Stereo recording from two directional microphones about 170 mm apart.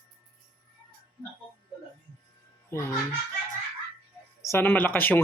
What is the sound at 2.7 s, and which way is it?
Speech, 15° left (ahead or behind).